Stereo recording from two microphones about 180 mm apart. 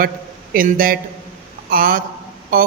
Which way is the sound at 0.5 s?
50° right (ahead or behind).